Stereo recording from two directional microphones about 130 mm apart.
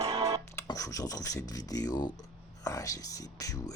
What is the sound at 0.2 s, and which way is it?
Music, 25° right (ahead or behind).